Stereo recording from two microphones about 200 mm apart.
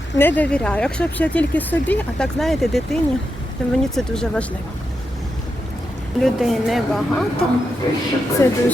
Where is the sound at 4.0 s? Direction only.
5° left (ahead or behind).